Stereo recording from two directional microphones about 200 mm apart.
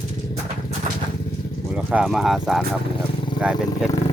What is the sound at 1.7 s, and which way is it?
Speech, 5° right (ahead or behind).